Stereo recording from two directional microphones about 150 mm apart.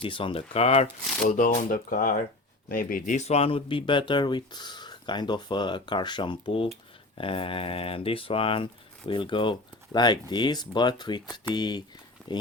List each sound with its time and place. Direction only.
0.0 s speech: 35° left (ahead or behind)
1.3 s speech: 60° left (ahead or behind)
3.2 s speech: 45° left (ahead or behind)